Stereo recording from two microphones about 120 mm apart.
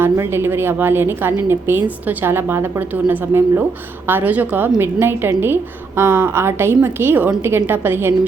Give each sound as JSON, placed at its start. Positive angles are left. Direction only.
{"t": 0.0, "sound": "a woman's voice", "side_deg": -20}